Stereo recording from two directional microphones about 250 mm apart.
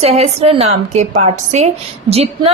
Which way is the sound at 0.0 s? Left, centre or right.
Right.